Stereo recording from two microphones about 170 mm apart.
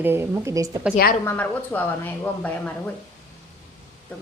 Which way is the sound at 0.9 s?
55° left (ahead or behind).